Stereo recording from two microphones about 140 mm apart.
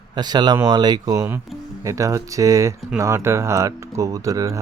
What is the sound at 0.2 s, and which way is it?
Speech, 30° right (ahead or behind).